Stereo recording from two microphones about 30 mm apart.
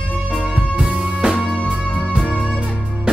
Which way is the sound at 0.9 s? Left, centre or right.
Right.